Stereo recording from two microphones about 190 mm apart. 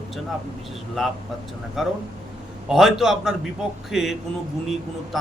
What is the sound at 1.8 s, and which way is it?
A man's voice, centre (ahead or behind).